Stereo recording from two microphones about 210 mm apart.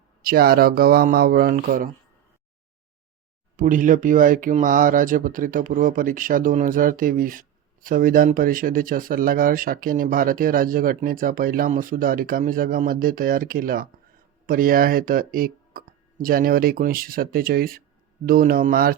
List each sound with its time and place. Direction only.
0.2 s speech: 45° right (ahead or behind)
3.6 s speech: 40° right (ahead or behind)